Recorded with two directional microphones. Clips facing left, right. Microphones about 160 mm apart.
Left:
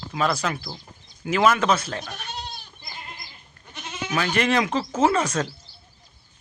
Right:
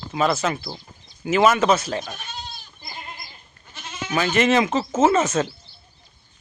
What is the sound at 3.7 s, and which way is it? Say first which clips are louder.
Goat: even; 15° left (ahead or behind).